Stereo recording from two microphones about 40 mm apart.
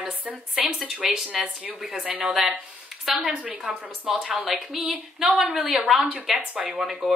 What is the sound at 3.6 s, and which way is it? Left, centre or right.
A woman's voice, centre.